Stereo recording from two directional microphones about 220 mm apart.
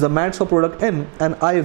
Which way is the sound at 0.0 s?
20° right (ahead or behind).